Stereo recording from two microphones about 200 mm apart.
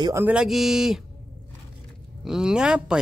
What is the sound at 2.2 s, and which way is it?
Speech, 5° right (ahead or behind).